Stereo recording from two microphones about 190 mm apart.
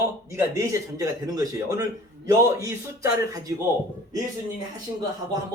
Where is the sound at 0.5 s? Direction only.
15° right (ahead or behind).